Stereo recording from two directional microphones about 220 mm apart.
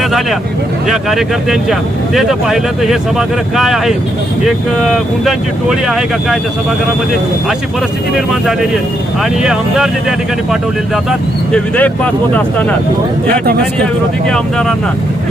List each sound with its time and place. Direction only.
0.9 s speech: centre (ahead or behind)
9.4 s speech: centre (ahead or behind)
13.2 s speech: 45° right (ahead or behind)
14.3 s speech: 5° left (ahead or behind)